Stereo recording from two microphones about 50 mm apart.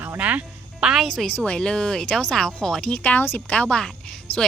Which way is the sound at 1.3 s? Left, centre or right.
Centre.